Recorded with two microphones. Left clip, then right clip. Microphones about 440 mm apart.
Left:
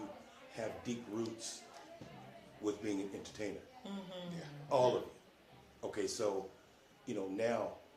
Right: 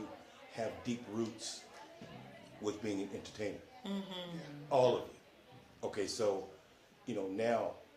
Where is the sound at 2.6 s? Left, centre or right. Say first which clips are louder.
Even; centre.